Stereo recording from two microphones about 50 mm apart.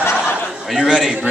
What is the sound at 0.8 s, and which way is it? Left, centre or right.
Speech, centre.